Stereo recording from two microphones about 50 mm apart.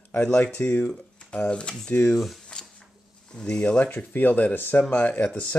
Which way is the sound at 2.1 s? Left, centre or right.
Centre.